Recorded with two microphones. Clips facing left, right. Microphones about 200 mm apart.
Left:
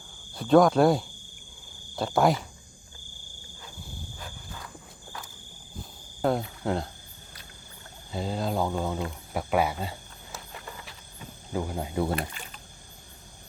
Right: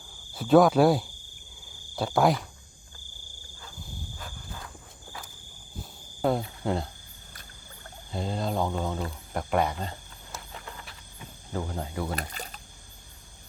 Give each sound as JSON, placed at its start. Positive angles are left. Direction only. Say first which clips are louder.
{"t": 0.3, "sound": "speech", "louder": "even", "side_deg": -5}
{"t": 6.2, "sound": "speech", "louder": "even", "side_deg": 0}
{"t": 8.1, "sound": "speech", "louder": "left 1 dB", "side_deg": 0}
{"t": 11.5, "sound": "speech", "louder": "left 2 dB", "side_deg": 10}
{"t": 12.1, "sound": "a sound", "louder": "left 3 dB", "side_deg": -40}